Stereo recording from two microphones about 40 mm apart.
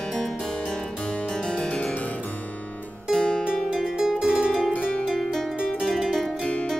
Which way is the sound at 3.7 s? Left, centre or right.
Centre.